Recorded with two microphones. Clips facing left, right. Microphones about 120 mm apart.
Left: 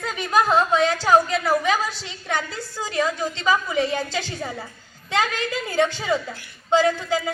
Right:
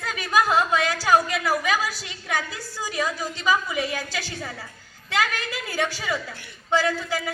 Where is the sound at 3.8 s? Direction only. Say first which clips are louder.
Left 5 dB; 25° left (ahead or behind).